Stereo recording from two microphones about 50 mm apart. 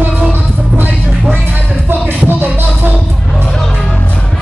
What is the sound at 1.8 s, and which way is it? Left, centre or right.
Music, right.